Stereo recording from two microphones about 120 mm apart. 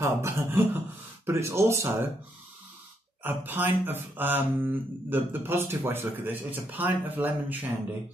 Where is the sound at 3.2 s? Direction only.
15° right (ahead or behind).